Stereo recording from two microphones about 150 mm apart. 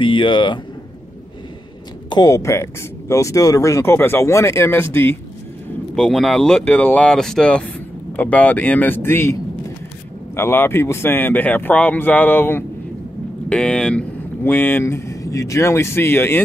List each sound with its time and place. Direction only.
0.0 s speech: 35° left (ahead or behind)
2.0 s speech: 25° left (ahead or behind)
5.9 s speech: 5° left (ahead or behind)